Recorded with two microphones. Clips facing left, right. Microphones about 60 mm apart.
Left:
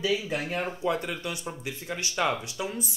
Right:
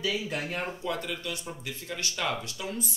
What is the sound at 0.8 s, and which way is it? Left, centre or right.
Speech, left.